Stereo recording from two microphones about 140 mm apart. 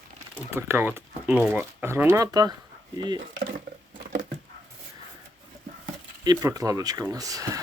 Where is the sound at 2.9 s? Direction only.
30° right (ahead or behind).